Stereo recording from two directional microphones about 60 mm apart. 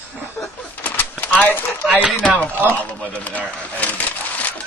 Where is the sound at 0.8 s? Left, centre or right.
Left.